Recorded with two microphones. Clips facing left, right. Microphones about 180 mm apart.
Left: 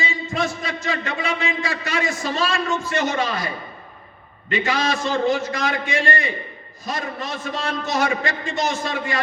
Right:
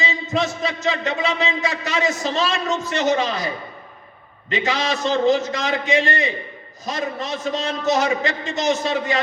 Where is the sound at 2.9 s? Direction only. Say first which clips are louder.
Right 4 dB; 55° left (ahead or behind).